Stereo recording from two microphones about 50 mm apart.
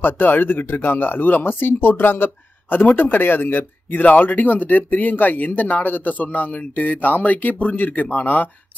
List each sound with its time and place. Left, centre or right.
0.0 s speech: left